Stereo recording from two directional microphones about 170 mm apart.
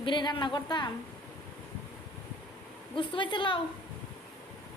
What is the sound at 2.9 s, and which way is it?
Speech, 30° left (ahead or behind).